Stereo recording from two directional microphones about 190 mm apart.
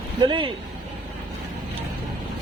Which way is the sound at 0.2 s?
25° right (ahead or behind).